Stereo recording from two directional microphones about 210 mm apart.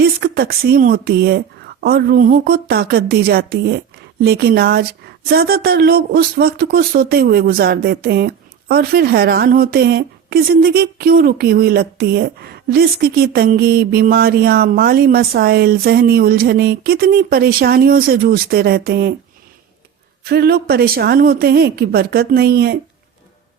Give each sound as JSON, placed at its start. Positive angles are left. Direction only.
{"t": 0.0, "sound": "a woman's voice", "side_deg": -45}
{"t": 20.2, "sound": "a woman's voice", "side_deg": -45}